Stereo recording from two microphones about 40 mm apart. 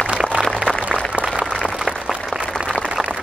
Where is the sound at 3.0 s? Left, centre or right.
Centre.